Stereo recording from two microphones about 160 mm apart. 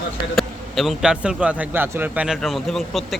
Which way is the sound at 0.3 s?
Centre (ahead or behind).